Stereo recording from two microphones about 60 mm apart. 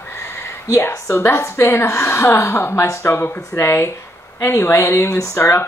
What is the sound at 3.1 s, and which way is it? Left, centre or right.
Speech, left.